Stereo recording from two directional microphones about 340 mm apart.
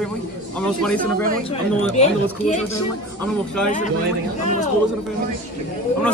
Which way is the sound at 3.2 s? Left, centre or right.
Centre.